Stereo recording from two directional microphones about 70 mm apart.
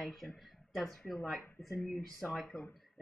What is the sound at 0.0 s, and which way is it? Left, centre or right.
Speech, centre.